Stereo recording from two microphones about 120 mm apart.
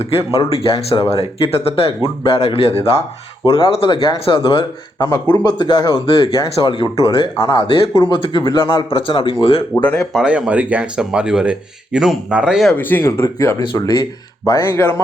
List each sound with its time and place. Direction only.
0.3 s speech: 50° left (ahead or behind)
9.8 s speech: 10° left (ahead or behind)
10.1 s speech: 5° right (ahead or behind)
12.7 s speech: 15° left (ahead or behind)
13.6 s speech: 35° left (ahead or behind); by 15.0 s 20° left (ahead or behind)